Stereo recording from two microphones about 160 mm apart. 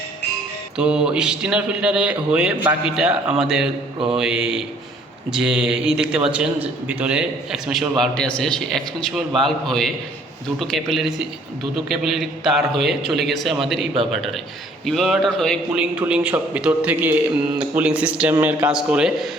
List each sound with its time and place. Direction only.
0.8 s a man's voice: 5° right (ahead or behind)
14.8 s a man's voice: centre (ahead or behind)